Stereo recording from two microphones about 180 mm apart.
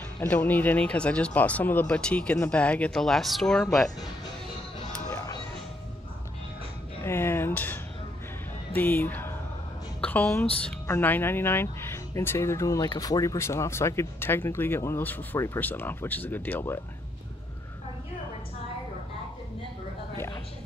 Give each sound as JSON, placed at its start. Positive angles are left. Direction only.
{"t": 0.2, "sound": "speech", "side_deg": 10}
{"t": 5.1, "sound": "music", "side_deg": 20}
{"t": 7.1, "sound": "speech", "side_deg": 15}